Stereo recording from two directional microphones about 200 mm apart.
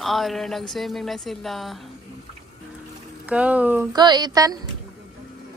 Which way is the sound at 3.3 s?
5° right (ahead or behind).